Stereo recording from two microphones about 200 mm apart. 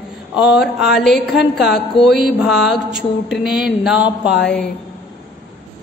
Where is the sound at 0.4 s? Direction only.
5° right (ahead or behind).